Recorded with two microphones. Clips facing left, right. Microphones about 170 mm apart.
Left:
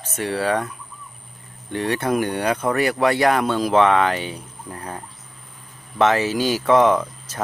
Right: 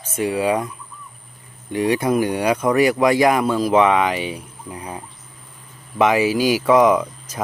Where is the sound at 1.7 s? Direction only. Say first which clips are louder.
Right 3 dB; 10° right (ahead or behind).